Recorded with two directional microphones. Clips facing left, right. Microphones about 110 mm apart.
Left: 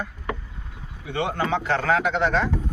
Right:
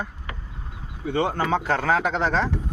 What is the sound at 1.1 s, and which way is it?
Speech, 40° right (ahead or behind).